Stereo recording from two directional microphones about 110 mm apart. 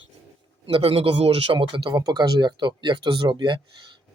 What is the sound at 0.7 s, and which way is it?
Speech, 60° right (ahead or behind).